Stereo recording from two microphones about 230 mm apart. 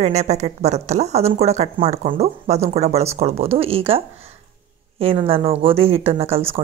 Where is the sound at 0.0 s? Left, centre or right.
Right.